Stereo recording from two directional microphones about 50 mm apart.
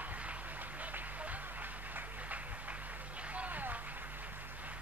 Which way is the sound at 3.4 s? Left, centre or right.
Right.